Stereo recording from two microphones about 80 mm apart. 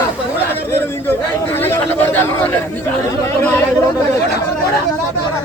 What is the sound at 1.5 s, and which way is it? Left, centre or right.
Speech, left.